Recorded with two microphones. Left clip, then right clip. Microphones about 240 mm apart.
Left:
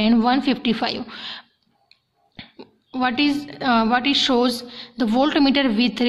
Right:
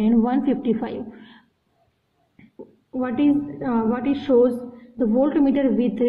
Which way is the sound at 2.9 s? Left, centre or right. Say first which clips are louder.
Left 1 dB; left.